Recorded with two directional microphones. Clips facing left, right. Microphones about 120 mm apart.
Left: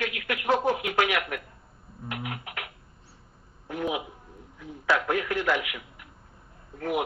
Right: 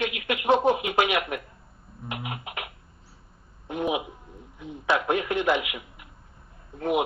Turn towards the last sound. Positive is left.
turn(degrees=-20)  # may be behind; listen again after turning